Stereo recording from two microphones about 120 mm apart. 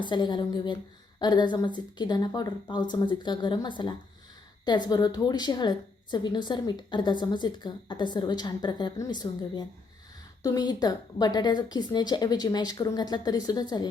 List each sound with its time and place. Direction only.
0.0 s a woman's voice: 40° left (ahead or behind)